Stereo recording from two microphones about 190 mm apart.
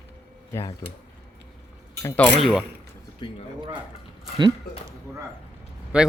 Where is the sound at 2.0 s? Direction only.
15° left (ahead or behind).